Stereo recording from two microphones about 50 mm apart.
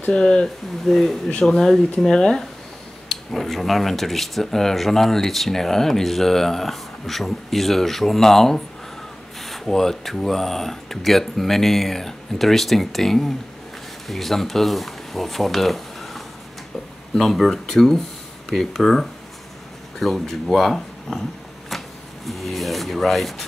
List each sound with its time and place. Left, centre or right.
0.0 s speech: centre
0.8 s speech: centre
21.6 s vehicle: centre